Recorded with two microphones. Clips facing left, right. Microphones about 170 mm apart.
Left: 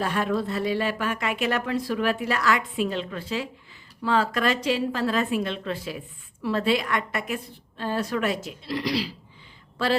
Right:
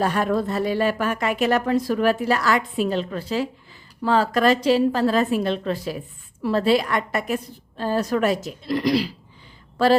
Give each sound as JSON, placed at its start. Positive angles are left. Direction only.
{"t": 0.0, "sound": "a woman's voice", "side_deg": -40}